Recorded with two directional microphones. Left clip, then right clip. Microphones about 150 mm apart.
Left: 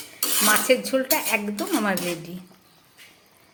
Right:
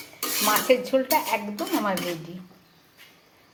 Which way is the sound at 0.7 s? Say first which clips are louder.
Even; 25° left (ahead or behind).